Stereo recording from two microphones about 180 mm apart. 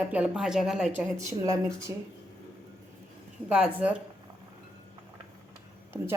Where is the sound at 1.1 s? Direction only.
15° right (ahead or behind).